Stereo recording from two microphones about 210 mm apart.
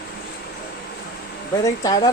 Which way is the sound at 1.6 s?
20° left (ahead or behind).